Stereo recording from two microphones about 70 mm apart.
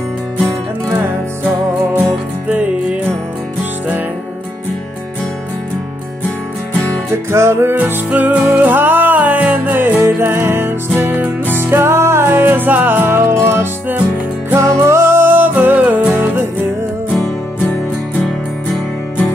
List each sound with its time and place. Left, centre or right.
2.5 s music: centre
7.2 s music: right
7.7 s music: right
17.6 s music: centre